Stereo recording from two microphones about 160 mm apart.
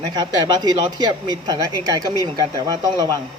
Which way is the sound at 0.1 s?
25° right (ahead or behind).